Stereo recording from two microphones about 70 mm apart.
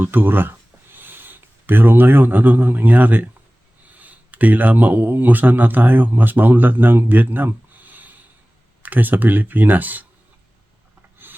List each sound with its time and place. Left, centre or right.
0.0 s speech: right
11.2 s filing: right